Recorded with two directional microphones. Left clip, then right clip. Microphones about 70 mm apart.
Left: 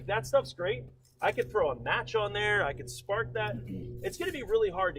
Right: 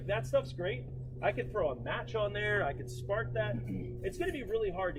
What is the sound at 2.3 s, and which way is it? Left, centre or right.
Speech, centre.